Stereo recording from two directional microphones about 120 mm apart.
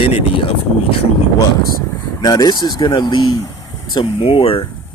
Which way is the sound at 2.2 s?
35° left (ahead or behind).